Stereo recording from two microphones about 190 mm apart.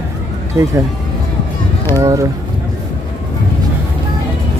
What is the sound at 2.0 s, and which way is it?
Speech, 15° right (ahead or behind).